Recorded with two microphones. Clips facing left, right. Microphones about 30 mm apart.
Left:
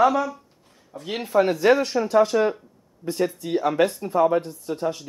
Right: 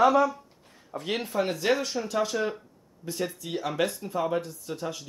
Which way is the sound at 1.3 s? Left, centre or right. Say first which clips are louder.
Left 9 dB; left.